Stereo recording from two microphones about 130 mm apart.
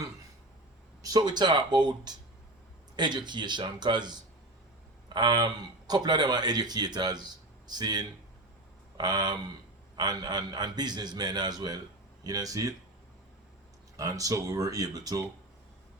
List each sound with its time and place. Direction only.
1.0 s a man's voice: 30° right (ahead or behind)
13.9 s speech: 25° right (ahead or behind)